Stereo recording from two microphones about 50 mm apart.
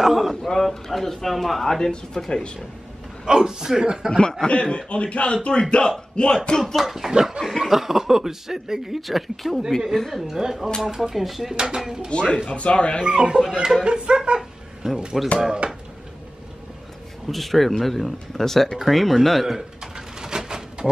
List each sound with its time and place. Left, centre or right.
0.0 s speech: centre
3.3 s a man's voice: centre
4.2 s a man's voice: centre
6.6 s speech: centre
11.5 s a man's voice: centre
12.1 s a man's voice: centre
13.0 s a man's voice: centre
13.8 s a sound: centre
15.1 s speech: centre
15.6 s a sound: right
17.3 s speech: centre
19.8 s a sound: centre